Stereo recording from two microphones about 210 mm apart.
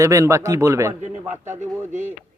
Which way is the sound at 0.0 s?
15° right (ahead or behind).